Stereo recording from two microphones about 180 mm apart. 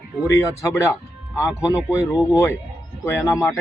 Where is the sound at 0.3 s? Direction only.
15° left (ahead or behind).